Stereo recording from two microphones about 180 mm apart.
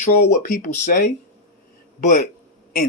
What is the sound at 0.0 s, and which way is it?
Speech, 45° left (ahead or behind).